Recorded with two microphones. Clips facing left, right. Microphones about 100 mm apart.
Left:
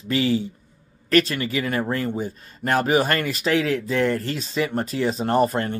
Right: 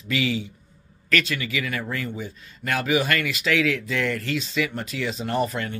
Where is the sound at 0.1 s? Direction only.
40° left (ahead or behind).